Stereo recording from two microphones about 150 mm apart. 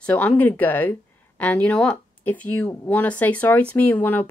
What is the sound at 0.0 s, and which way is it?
Speech, 10° left (ahead or behind).